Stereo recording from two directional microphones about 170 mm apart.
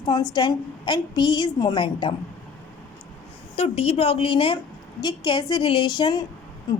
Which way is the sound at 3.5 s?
35° left (ahead or behind).